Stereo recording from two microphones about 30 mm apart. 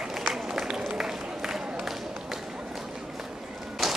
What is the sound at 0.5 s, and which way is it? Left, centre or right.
Run, centre.